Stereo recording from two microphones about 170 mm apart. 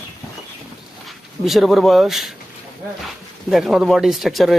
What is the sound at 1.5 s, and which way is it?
Speech, centre (ahead or behind).